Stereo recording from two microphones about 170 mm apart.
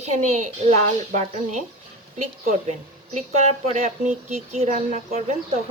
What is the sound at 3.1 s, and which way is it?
Speech, 45° right (ahead or behind).